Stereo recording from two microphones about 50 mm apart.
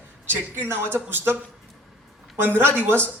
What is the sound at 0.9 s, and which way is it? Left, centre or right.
Speech, right.